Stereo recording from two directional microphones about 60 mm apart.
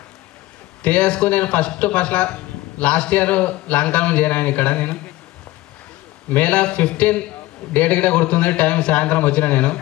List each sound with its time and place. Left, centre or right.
0.8 s speech: left
6.3 s speech: left